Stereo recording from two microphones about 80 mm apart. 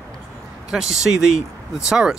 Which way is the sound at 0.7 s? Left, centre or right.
Centre.